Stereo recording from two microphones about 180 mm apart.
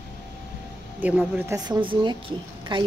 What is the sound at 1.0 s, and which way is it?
Speech, 10° right (ahead or behind).